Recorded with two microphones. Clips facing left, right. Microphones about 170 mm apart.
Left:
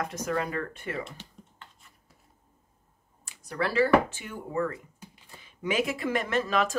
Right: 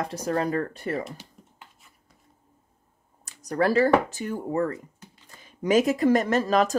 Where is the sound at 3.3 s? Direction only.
45° right (ahead or behind).